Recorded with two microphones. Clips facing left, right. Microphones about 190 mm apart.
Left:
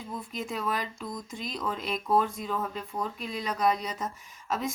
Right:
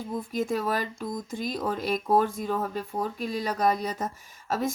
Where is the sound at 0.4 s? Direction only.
45° right (ahead or behind).